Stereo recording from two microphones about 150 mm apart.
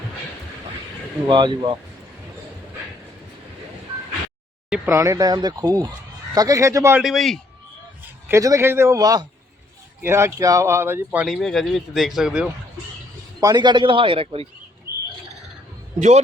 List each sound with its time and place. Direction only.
1.3 s a man's voice: 30° right (ahead or behind)
4.9 s speech: 20° right (ahead or behind)
7.0 s speech: centre (ahead or behind)
8.3 s speech: 20° right (ahead or behind)
11.3 s speech: 5° left (ahead or behind)
13.4 s a man's voice: 30° right (ahead or behind)
16.0 s a man's voice: 50° right (ahead or behind)